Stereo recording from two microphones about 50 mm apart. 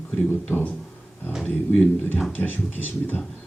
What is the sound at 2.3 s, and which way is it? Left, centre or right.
Speech, left.